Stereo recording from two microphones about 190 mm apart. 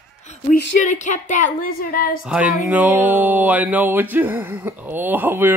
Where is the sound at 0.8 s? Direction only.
40° left (ahead or behind).